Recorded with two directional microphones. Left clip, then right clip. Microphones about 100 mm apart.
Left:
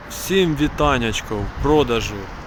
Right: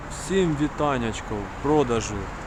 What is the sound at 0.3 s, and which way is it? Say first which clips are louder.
Speech: left 5 dB; 25° left (ahead or behind).